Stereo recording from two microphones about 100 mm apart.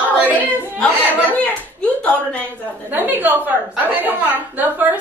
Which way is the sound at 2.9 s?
20° right (ahead or behind).